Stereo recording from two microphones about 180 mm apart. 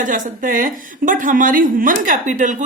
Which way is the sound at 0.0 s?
45° right (ahead or behind).